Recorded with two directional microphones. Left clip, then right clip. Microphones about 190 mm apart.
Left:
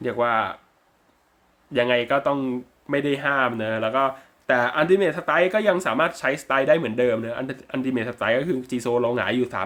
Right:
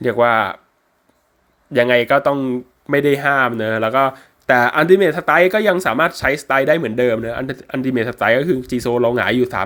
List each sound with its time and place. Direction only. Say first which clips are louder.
0.0 s speech: right 7 dB; 30° right (ahead or behind)
1.7 s speech: right 7 dB; 30° right (ahead or behind)